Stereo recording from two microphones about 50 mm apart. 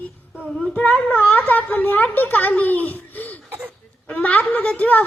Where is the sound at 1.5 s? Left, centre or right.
Left.